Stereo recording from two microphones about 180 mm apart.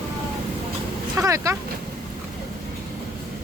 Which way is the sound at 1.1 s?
15° right (ahead or behind).